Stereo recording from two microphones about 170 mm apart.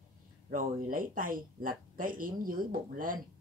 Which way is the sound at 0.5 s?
55° right (ahead or behind).